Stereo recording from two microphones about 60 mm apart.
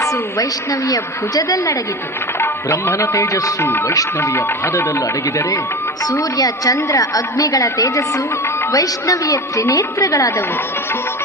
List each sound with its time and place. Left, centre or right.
0.0 s a woman's voice: left
2.4 s music: left
3.6 s speech: left
6.1 s a woman's voice: left